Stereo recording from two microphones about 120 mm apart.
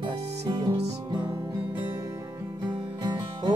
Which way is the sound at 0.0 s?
55° right (ahead or behind).